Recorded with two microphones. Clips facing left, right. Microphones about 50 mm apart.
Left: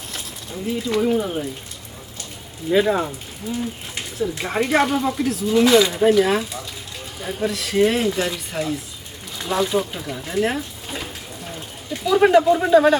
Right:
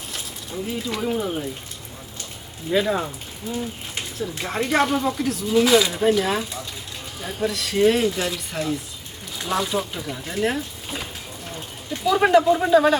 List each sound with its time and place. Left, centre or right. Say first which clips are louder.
0.1 s speech: even; centre
2.6 s speech: left 3 dB; centre
4.2 s speech: left 4 dB; centre